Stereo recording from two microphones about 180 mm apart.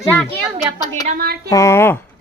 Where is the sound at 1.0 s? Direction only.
55° right (ahead or behind).